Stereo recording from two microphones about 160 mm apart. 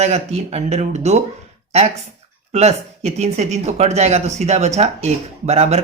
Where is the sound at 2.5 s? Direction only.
45° right (ahead or behind).